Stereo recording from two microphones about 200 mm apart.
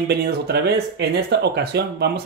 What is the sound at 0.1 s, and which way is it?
Speech, 55° right (ahead or behind).